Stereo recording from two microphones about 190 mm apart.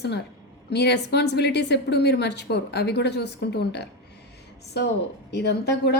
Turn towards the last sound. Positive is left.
turn(degrees=60)  # may be behind; listen again after turning